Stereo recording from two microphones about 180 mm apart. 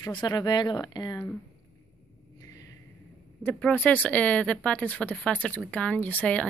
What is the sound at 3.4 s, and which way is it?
Speech, 10° left (ahead or behind).